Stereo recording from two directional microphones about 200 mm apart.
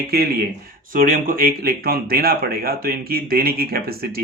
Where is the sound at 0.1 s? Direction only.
50° right (ahead or behind).